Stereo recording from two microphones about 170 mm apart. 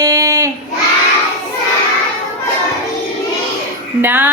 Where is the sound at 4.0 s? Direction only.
10° right (ahead or behind).